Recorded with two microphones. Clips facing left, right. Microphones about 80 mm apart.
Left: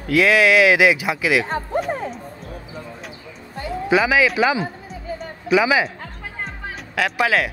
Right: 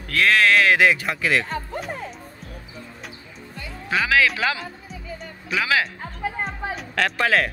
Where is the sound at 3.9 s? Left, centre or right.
Centre.